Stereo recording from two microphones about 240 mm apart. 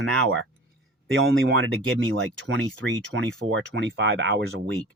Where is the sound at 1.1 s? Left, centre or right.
Right.